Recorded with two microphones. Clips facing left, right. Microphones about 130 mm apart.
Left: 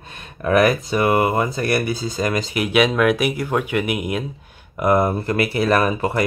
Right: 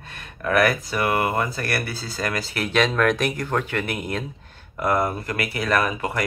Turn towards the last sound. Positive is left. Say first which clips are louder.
# left 4 dB
turn(degrees=30)  # may be behind; listen again after turning